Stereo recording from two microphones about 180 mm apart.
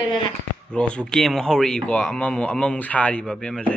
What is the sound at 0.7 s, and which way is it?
A man's voice, 5° left (ahead or behind).